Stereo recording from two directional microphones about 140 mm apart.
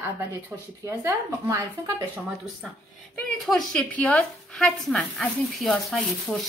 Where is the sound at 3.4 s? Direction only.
Centre (ahead or behind).